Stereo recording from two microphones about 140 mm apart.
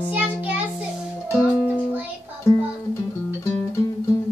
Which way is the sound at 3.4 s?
20° left (ahead or behind).